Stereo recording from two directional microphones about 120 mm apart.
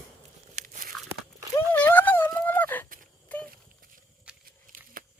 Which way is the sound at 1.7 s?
15° left (ahead or behind).